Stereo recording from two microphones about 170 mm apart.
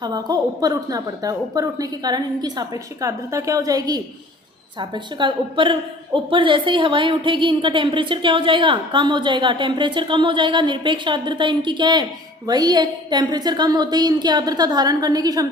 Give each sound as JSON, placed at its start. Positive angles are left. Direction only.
{"t": 0.0, "sound": "a woman's voice", "side_deg": -25}